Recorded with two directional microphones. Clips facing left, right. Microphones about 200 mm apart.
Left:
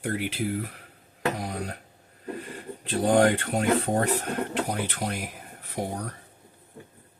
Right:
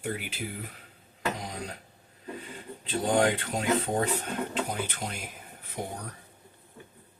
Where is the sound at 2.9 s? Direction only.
55° left (ahead or behind).